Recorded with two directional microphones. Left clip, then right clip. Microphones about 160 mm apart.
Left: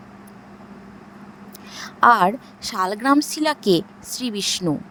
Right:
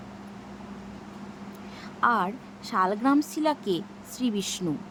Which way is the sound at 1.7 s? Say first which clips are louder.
Left 10 dB; 55° left (ahead or behind).